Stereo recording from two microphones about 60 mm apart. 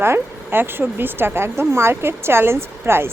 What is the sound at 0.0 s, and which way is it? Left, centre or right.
Speech, right.